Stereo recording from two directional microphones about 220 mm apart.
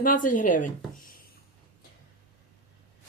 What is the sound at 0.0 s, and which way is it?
Speech, 40° left (ahead or behind).